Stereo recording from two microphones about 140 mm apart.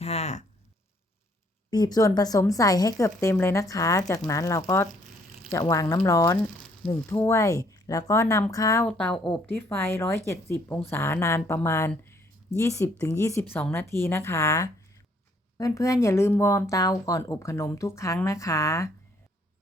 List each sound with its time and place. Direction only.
0.0 s a sound: 50° left (ahead or behind)
1.7 s speech: 30° left (ahead or behind)
8.9 s speech: 5° left (ahead or behind)